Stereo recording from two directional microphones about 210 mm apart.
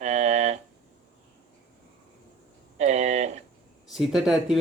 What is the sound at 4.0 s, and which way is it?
Speech, centre (ahead or behind).